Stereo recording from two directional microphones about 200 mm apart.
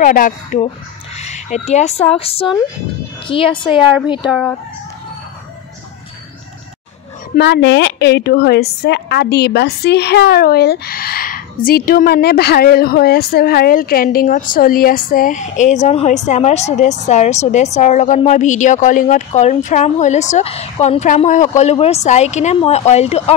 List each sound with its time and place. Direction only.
0.0 s a woman's voice: 45° left (ahead or behind); by 4.3 s 25° left (ahead or behind)
7.3 s a woman's voice: 60° left (ahead or behind); by 23.3 s 30° left (ahead or behind)